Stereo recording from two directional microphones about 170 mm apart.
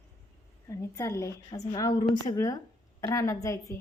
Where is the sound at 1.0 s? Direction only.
15° left (ahead or behind).